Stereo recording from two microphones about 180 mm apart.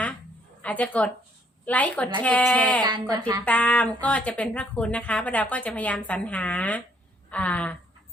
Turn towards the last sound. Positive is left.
turn(degrees=5)  # may be behind; listen again after turning